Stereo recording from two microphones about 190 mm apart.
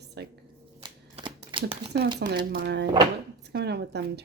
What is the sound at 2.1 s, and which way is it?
Speech, 60° right (ahead or behind).